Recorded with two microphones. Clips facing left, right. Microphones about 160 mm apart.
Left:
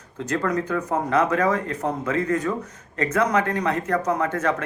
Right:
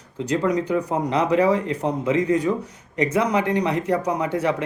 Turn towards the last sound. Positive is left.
turn(degrees=-15)  # may be behind; listen again after turning